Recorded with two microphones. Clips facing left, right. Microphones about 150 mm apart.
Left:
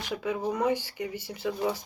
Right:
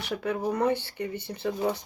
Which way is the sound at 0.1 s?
10° left (ahead or behind).